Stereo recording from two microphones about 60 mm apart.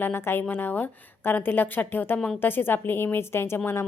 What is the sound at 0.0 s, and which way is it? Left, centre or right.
A woman's voice, left.